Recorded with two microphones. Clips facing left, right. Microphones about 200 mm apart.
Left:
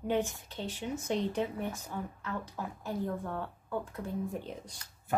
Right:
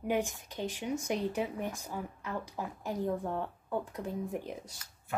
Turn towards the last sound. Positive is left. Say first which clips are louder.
# right 1 dB
turn(degrees=-15)  # may be behind; listen again after turning